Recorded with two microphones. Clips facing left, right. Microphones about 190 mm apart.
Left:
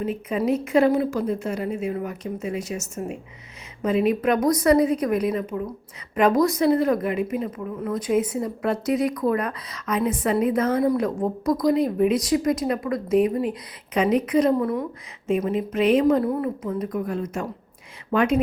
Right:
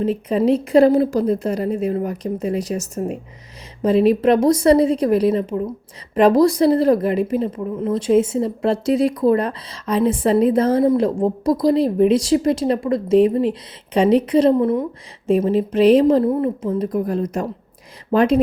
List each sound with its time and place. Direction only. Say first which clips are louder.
0.0 s a woman's voice: right 6 dB; 30° right (ahead or behind)